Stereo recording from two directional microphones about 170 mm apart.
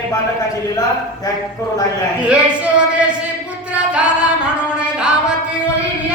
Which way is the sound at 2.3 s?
5° right (ahead or behind).